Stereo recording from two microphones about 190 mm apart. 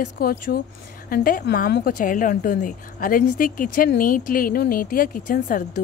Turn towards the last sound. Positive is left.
turn(degrees=45)  # may be behind; listen again after turning